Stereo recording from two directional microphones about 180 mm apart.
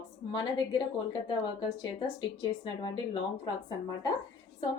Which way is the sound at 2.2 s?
25° left (ahead or behind).